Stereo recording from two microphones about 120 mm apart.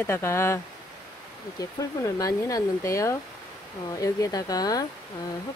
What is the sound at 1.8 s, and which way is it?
Speech, 30° left (ahead or behind).